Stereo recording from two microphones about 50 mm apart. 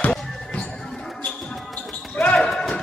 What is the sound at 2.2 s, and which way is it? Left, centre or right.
Basketball bounce, left.